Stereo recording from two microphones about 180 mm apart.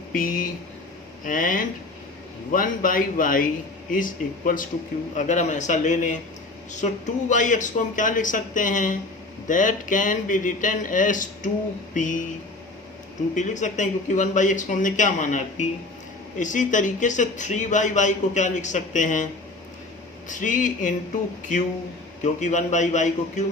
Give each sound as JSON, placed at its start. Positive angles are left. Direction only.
{"t": 0.1, "sound": "a sound", "side_deg": 50}
{"t": 1.2, "sound": "speech", "side_deg": 45}
{"t": 13.3, "sound": "speech", "side_deg": 45}
{"t": 22.2, "sound": "a man's voice", "side_deg": 40}